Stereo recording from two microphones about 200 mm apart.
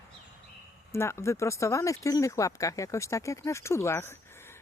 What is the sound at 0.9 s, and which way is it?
Speech, 15° left (ahead or behind).